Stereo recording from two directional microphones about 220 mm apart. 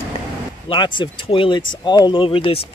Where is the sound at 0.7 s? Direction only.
20° left (ahead or behind).